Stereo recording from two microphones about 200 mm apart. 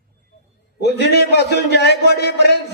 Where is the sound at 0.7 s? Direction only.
55° left (ahead or behind).